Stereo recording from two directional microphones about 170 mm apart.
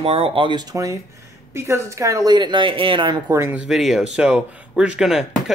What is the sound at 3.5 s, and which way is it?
Speech, 5° right (ahead or behind).